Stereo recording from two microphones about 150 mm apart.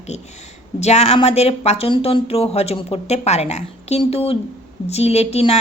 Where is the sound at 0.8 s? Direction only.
45° left (ahead or behind).